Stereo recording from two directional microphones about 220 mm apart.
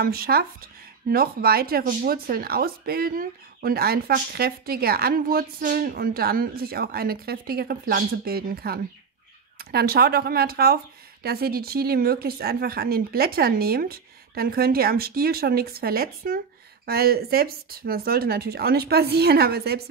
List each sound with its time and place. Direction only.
0.0 s speech: 45° right (ahead or behind)